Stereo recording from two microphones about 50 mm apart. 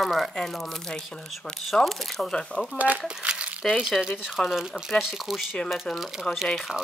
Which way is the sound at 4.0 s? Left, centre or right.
Centre.